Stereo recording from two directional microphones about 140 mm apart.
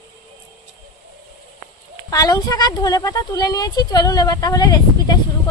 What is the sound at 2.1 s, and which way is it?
Speech, 25° left (ahead or behind).